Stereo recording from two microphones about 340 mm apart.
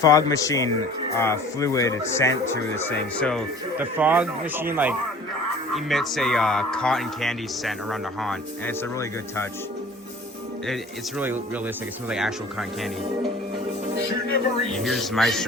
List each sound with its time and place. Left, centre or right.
0.0 s a man's voice: centre
11.2 s speech: centre
14.7 s speech: centre